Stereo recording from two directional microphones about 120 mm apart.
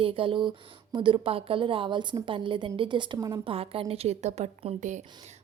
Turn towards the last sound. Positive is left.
turn(degrees=-60)  # may be behind; listen again after turning